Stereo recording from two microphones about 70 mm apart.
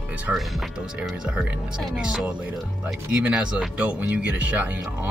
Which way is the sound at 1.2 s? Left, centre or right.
Centre.